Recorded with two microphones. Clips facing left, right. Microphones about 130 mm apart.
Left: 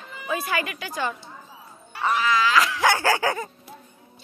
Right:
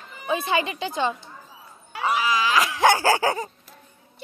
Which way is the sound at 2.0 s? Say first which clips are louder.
Left 1 dB; 10° right (ahead or behind).